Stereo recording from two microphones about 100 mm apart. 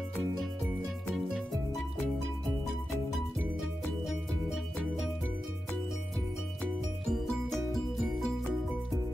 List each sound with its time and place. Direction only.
7.1 s music: 5° left (ahead or behind)